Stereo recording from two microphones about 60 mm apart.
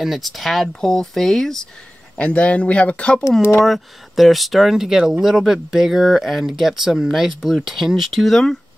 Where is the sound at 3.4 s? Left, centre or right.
Left.